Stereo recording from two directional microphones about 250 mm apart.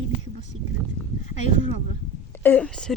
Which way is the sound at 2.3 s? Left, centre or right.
Centre.